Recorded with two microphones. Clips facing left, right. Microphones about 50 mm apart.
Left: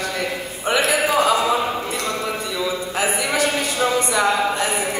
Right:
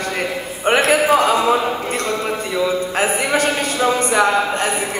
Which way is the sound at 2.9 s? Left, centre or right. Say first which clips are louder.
Right 1 dB; right.